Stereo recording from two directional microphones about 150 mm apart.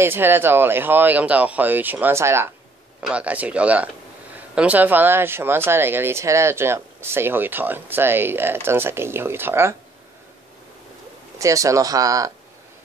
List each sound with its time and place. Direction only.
0.0 s speech: 15° right (ahead or behind)
11.3 s speech: 20° right (ahead or behind)